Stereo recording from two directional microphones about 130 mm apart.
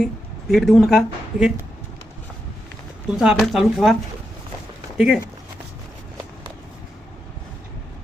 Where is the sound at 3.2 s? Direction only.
5° right (ahead or behind).